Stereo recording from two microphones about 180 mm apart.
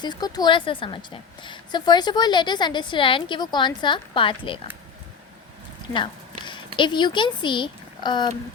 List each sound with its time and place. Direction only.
0.0 s a woman's voice: 25° left (ahead or behind)
6.5 s speech: 25° left (ahead or behind)